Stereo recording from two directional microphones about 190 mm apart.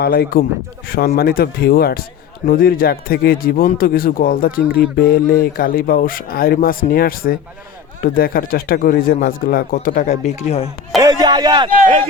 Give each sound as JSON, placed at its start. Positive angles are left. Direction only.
{"t": 0.0, "sound": "a man's voice", "side_deg": 55}
{"t": 11.0, "sound": "speech", "side_deg": -20}